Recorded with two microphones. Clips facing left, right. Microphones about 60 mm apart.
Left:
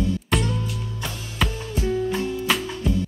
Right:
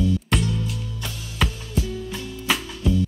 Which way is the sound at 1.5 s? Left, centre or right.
Left.